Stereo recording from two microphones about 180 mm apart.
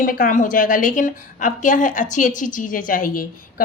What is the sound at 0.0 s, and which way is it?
A woman's voice, 50° left (ahead or behind).